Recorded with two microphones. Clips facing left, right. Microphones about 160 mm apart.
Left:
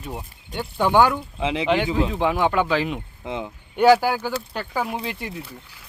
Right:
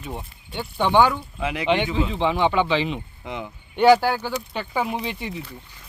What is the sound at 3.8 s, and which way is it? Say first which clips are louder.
Speech: even; 5° left (ahead or behind).